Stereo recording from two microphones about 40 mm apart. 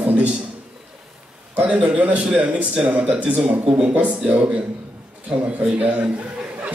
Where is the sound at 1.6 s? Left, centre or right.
Right.